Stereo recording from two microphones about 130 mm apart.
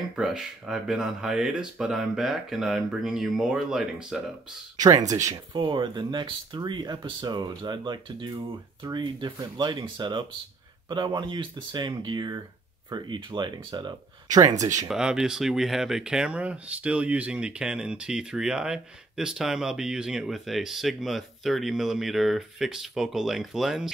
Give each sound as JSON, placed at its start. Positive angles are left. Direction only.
{"t": 0.1, "sound": "speech", "side_deg": -5}
{"t": 5.1, "sound": "speech", "side_deg": -25}
{"t": 5.6, "sound": "speech", "side_deg": -35}
{"t": 14.9, "sound": "speech", "side_deg": -5}